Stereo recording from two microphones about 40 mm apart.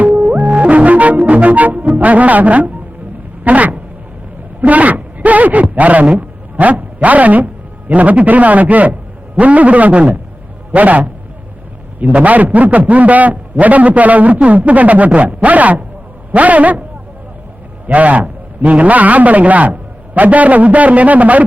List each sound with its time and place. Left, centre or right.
0.0 s music: right
2.0 s a man's voice: right
17.8 s a man's voice: right